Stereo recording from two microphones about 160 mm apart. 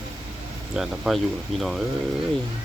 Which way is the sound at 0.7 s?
Centre (ahead or behind).